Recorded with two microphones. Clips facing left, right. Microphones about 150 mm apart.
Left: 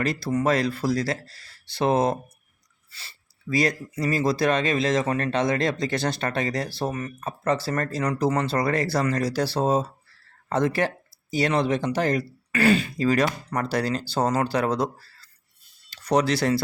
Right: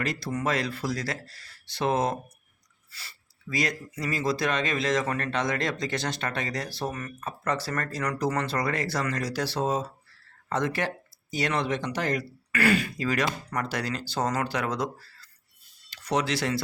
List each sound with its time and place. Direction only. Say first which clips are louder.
0.0 s speech: left 5 dB; 35° left (ahead or behind)